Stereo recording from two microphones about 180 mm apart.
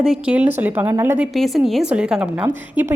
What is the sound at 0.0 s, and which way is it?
A woman's voice, 5° right (ahead or behind).